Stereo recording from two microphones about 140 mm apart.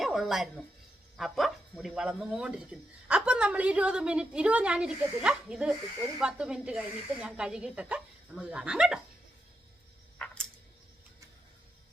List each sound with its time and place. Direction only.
0.0 s speech: centre (ahead or behind)
10.2 s tick-tock: 10° left (ahead or behind)